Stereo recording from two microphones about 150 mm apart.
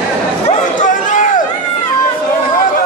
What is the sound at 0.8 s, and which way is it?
Run, 60° left (ahead or behind).